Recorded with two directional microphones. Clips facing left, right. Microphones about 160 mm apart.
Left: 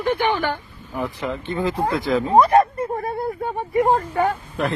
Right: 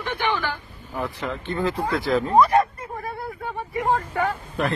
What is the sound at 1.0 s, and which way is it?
Speech, 15° left (ahead or behind).